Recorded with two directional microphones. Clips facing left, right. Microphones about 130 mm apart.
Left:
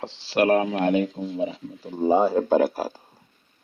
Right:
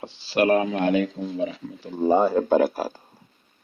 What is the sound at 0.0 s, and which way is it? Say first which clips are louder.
Speech: even; 90° left.